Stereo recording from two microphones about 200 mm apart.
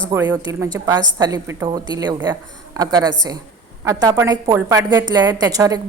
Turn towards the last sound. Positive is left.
turn(degrees=-20)  # may be behind; listen again after turning